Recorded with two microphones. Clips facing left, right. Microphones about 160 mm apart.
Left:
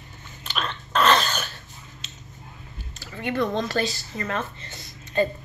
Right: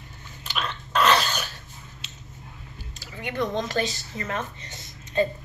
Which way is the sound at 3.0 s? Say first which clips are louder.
Left 3 dB; 15° right (ahead or behind).